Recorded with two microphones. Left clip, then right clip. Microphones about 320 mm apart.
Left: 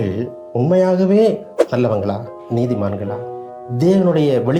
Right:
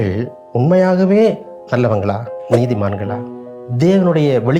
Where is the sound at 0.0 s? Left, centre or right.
Right.